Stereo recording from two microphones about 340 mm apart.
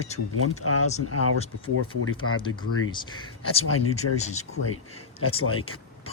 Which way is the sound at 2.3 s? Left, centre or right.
Centre.